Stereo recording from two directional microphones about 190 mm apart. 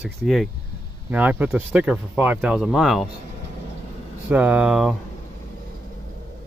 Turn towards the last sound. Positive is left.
turn(degrees=0)  # may be behind; listen again after turning